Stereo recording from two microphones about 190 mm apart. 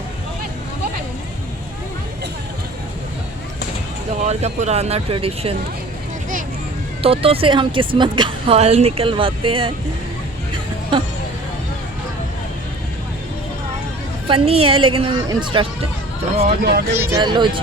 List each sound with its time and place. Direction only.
4.3 s speech: 35° right (ahead or behind)
7.0 s a woman's voice: 30° right (ahead or behind)
14.3 s a woman's voice: 30° right (ahead or behind)
16.5 s speech: 55° right (ahead or behind)
16.9 s a woman's voice: 15° right (ahead or behind)